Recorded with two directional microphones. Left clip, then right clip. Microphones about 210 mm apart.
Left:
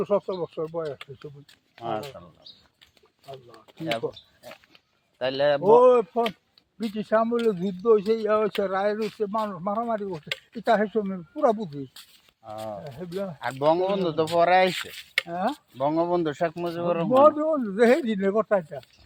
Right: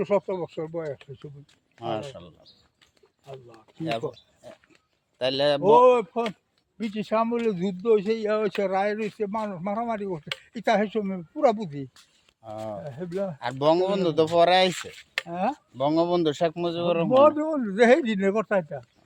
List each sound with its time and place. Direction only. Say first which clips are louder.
0.0 s speech: even; 15° right (ahead or behind)
1.8 s speech: even; 40° right (ahead or behind)
3.3 s speech: even; 40° left (ahead or behind)
5.2 s speech: even; 35° right (ahead or behind)
5.6 s speech: even; 10° right (ahead or behind)
12.5 s speech: right 1 dB; 35° right (ahead or behind)
15.3 s speech: right 3 dB; 15° right (ahead or behind)
15.8 s speech: right 1 dB; 35° right (ahead or behind)
17.2 s speech: left 1 dB; 20° right (ahead or behind)